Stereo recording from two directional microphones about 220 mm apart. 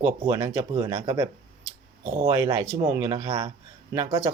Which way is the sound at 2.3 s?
15° right (ahead or behind).